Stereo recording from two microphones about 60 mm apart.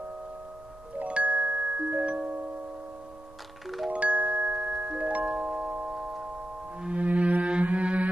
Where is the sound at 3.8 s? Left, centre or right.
Right.